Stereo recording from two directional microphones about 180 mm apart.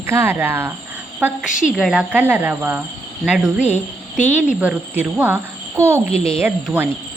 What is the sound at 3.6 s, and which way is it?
Speech, 40° left (ahead or behind).